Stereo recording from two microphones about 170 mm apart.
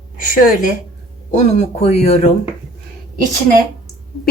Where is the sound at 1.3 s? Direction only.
40° left (ahead or behind).